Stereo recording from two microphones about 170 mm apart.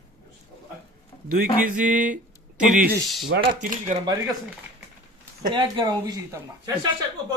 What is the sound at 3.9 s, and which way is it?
Speech, 45° right (ahead or behind).